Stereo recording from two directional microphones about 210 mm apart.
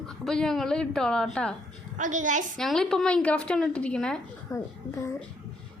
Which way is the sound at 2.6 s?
Centre (ahead or behind).